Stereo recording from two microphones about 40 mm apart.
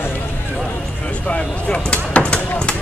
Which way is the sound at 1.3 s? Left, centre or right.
Left.